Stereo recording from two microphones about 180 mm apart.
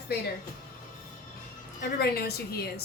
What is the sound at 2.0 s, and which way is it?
Speech, 60° left (ahead or behind).